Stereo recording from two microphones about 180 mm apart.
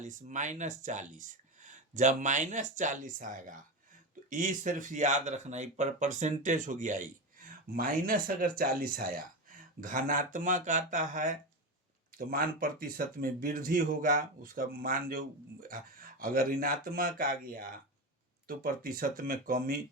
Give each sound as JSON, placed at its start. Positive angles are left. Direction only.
{"t": 0.0, "sound": "speech", "side_deg": -45}